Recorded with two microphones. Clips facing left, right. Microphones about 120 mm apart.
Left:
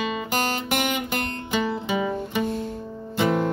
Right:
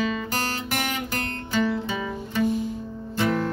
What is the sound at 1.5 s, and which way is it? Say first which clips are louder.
Music: even; 15° left (ahead or behind).